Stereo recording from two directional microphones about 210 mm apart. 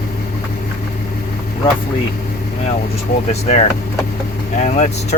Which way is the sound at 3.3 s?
30° left (ahead or behind).